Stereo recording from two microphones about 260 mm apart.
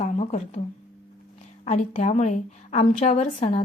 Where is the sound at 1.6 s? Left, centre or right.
Left.